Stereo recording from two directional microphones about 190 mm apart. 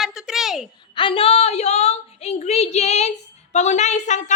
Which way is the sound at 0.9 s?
25° left (ahead or behind).